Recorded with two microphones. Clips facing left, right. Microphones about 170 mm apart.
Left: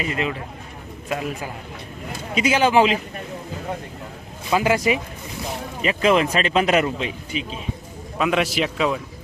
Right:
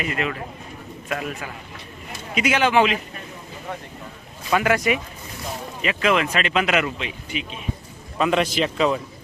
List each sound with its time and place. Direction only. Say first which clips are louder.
0.0 s speech: left 1 dB; 30° left (ahead or behind)
2.3 s speech: left 2 dB; 35° left (ahead or behind)
4.5 s speech: left 1 dB; 25° left (ahead or behind)
8.2 s a man's voice: right 1 dB; 5° left (ahead or behind)